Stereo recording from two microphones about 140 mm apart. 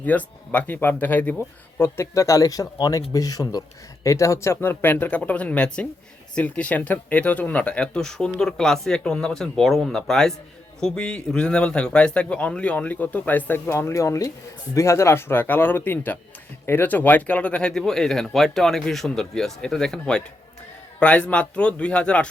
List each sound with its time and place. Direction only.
0.0 s a man's voice: 10° left (ahead or behind)